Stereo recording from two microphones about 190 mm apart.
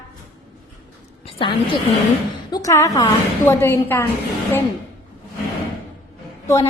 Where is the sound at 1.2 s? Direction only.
30° left (ahead or behind); by 4.1 s 10° left (ahead or behind).